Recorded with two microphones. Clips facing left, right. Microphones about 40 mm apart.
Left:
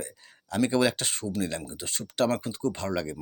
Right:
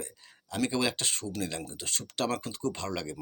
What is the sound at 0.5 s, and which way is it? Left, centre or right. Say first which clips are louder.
Speech: left 5 dB; centre.